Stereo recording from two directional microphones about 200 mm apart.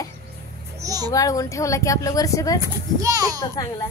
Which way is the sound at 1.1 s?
15° left (ahead or behind).